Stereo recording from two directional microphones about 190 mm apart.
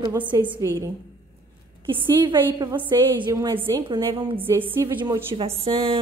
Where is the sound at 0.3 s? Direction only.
15° right (ahead or behind).